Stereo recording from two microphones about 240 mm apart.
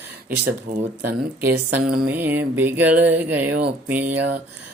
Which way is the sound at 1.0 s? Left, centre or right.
Centre.